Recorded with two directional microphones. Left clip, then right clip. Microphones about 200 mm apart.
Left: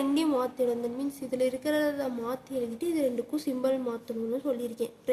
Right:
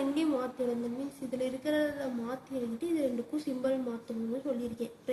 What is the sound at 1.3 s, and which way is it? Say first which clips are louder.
A woman's voice: left 4 dB; 55° left (ahead or behind).